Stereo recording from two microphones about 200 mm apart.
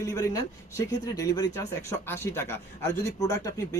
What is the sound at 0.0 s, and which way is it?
Speech, 15° left (ahead or behind).